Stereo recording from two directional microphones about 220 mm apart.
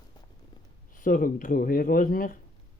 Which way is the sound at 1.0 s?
40° left (ahead or behind).